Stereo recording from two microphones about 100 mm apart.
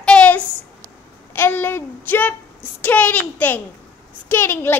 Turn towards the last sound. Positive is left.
turn(degrees=25)  # may be behind; listen again after turning